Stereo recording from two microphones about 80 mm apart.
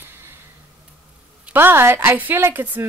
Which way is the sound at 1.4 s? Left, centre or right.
Right.